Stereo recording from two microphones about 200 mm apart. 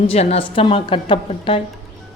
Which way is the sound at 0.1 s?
30° left (ahead or behind).